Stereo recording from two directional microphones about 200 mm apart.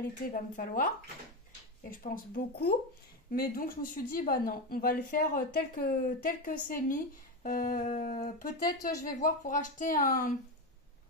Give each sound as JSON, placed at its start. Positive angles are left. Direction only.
{"t": 0.6, "sound": "speech", "side_deg": 45}